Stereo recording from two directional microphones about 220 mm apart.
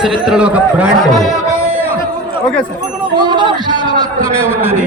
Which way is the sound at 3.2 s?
20° right (ahead or behind).